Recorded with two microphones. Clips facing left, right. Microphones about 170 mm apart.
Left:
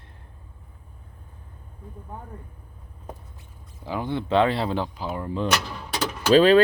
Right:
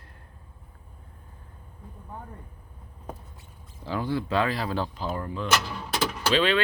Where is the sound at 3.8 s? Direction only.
20° left (ahead or behind).